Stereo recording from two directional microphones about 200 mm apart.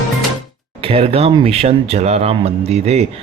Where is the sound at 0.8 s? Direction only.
30° right (ahead or behind).